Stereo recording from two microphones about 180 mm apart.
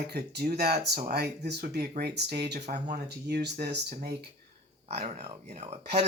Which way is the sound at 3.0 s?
65° right (ahead or behind).